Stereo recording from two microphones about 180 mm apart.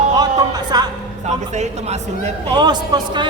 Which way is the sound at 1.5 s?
40° right (ahead or behind).